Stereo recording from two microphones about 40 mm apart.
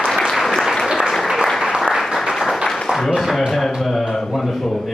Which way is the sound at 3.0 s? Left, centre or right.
Centre.